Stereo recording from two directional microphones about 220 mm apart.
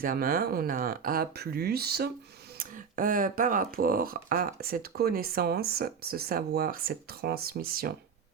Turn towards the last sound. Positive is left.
turn(degrees=-40)  # may be behind; listen again after turning